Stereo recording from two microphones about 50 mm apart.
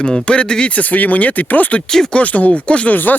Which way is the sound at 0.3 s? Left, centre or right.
Centre.